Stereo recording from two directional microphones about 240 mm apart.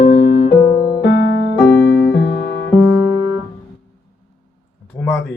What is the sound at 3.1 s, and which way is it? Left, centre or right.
Music, centre.